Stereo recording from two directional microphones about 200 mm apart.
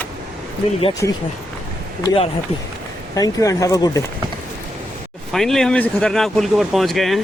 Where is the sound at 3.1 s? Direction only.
15° left (ahead or behind).